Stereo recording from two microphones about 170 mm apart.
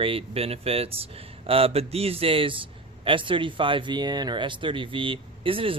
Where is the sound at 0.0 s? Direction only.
35° right (ahead or behind).